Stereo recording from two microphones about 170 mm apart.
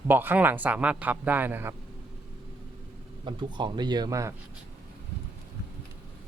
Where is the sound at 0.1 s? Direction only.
10° right (ahead or behind).